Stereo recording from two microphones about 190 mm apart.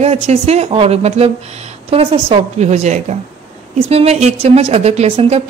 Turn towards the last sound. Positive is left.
turn(degrees=-35)  # may be behind; listen again after turning